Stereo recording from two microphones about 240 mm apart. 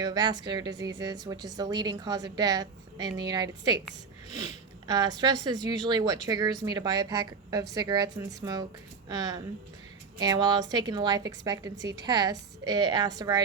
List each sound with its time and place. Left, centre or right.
0.0 s a woman's voice: centre
4.9 s a woman's voice: centre